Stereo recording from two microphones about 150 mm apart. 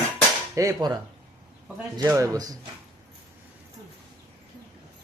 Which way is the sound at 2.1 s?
20° right (ahead or behind).